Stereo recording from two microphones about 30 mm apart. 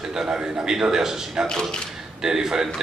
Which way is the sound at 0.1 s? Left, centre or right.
Right.